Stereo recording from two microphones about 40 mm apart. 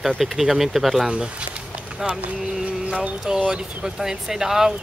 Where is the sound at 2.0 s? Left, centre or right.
Right.